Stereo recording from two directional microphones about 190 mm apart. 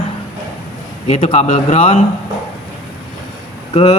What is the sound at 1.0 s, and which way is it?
Speech, 35° left (ahead or behind).